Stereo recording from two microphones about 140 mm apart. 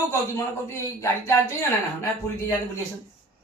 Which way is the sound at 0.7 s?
20° left (ahead or behind).